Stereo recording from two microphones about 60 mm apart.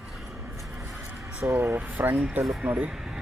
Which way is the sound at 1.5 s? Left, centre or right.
Right.